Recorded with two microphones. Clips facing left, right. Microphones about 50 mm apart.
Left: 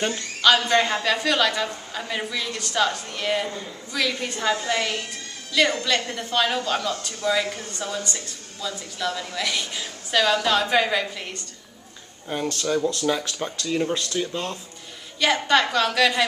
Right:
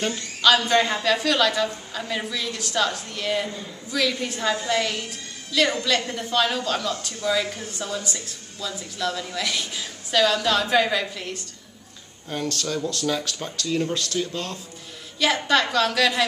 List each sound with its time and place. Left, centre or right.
0.4 s a woman's voice: centre
7.5 s a woman's voice: centre
12.3 s a woman's voice: centre
15.1 s a woman's voice: centre